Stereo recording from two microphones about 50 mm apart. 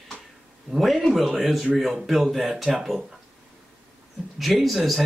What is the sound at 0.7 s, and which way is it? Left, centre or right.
Speech, centre.